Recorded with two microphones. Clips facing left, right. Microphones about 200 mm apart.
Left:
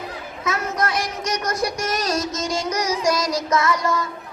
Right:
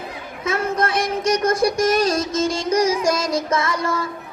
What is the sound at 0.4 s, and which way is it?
Speech, 30° right (ahead or behind).